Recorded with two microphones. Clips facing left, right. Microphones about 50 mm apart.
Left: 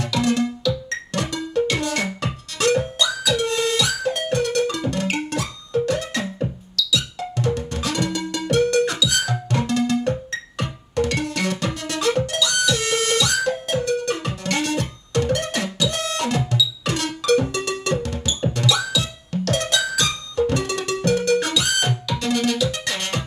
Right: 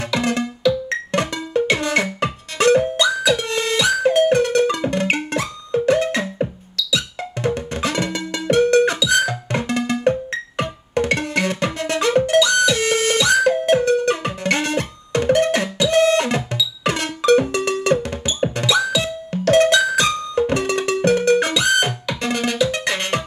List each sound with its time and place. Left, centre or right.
0.0 s music: right